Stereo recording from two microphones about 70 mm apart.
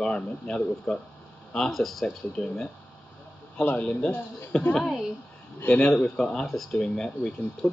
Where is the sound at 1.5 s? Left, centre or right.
Centre.